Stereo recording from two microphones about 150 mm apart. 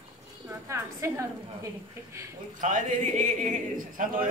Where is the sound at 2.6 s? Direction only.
60° right (ahead or behind).